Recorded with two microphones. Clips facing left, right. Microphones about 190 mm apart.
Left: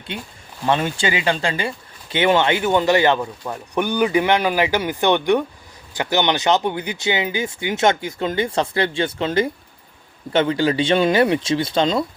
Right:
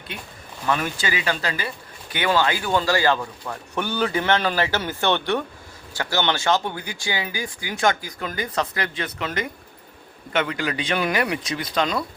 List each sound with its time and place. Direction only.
0.1 s speech: 30° left (ahead or behind)